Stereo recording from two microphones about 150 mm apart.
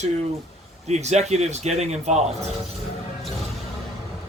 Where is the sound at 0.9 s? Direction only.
45° right (ahead or behind).